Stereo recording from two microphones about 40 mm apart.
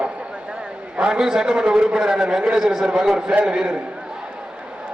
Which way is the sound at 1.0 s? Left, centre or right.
Centre.